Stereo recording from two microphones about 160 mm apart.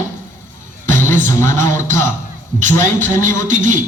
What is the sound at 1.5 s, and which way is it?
Speech, 50° right (ahead or behind).